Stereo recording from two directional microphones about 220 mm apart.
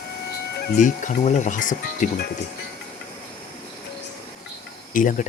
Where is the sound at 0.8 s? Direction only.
35° left (ahead or behind).